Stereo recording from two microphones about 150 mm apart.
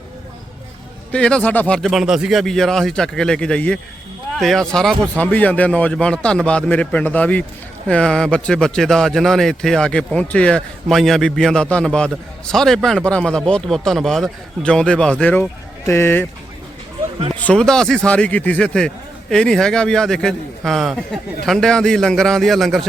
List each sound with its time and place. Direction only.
1.1 s a man's voice: 5° left (ahead or behind)
17.3 s a man's voice: 10° left (ahead or behind)